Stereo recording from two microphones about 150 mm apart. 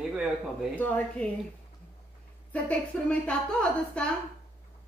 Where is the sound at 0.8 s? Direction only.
10° left (ahead or behind).